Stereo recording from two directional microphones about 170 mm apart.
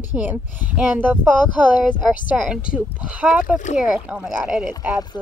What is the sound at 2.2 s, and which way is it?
A woman's voice, 5° right (ahead or behind).